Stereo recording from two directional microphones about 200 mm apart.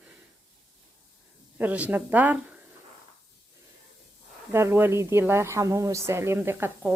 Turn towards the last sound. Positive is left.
turn(degrees=-10)  # may be behind; listen again after turning